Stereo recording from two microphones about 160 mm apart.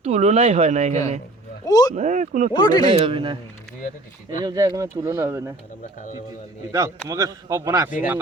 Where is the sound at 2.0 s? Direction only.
50° right (ahead or behind).